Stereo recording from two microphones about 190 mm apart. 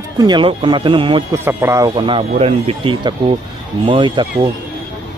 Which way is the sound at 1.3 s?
15° right (ahead or behind).